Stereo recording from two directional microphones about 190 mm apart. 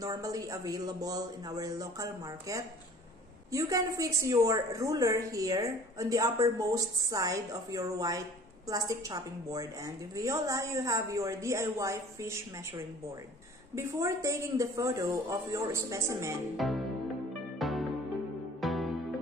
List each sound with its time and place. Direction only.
0.0 s a woman's voice: 20° right (ahead or behind)
13.7 s a woman's voice: 15° right (ahead or behind)
16.5 s music: centre (ahead or behind)